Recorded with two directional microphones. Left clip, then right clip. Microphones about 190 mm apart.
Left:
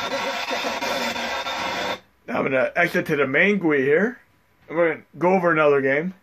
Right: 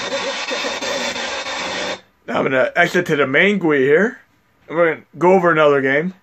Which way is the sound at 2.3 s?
35° right (ahead or behind).